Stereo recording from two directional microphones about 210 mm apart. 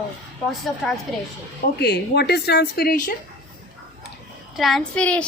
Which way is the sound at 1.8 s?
50° left (ahead or behind).